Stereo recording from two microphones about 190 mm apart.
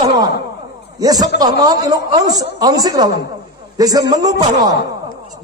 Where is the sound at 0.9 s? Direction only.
20° right (ahead or behind).